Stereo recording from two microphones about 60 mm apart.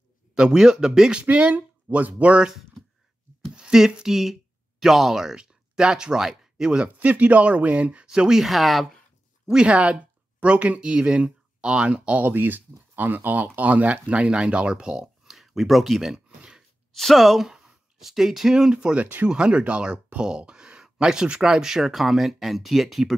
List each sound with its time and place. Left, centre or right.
0.3 s speech: centre
1.2 s speech: right
3.5 s speech: centre
9.5 s speech: centre
12.3 s speech: right; by 16.6 s centre
16.9 s speech: centre